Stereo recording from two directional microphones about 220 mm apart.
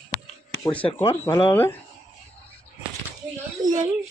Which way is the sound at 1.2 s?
25° left (ahead or behind).